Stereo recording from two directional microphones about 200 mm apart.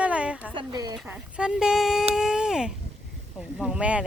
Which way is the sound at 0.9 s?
5° right (ahead or behind).